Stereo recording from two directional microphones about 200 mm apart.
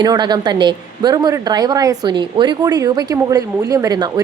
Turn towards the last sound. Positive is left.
turn(degrees=-20)  # may be behind; listen again after turning